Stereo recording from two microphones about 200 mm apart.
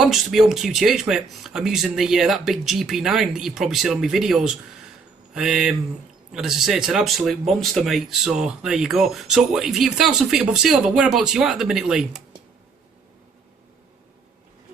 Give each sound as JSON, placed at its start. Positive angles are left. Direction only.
{"t": 0.0, "sound": "speech", "side_deg": 0}